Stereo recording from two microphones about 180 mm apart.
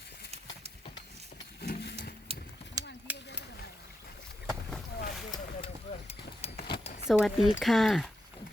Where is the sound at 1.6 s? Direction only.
65° left (ahead or behind).